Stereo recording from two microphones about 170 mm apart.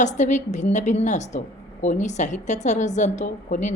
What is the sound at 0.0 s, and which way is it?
A woman's voice, 45° left (ahead or behind).